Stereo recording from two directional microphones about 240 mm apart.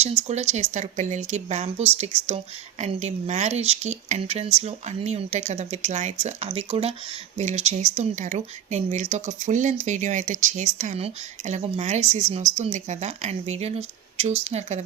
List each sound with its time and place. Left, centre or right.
0.0 s speech: right